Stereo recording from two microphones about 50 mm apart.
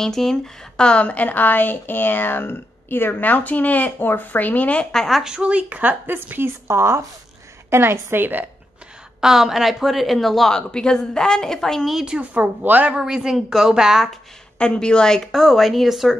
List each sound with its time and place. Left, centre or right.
0.0 s a woman's voice: centre
0.8 s a woman's voice: left
4.9 s a woman's voice: centre
5.2 s a woman's voice: centre
5.5 s a woman's voice: right
6.7 s speech: right
7.7 s a woman's voice: right
9.2 s a woman's voice: centre
10.7 s a woman's voice: centre
11.9 s a woman's voice: centre
12.4 s a woman's voice: right
13.0 s a woman's voice: centre
14.6 s a woman's voice: centre
15.3 s a woman's voice: centre